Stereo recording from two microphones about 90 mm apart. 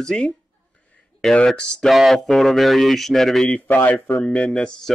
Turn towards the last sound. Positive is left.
turn(degrees=10)  # may be behind; listen again after turning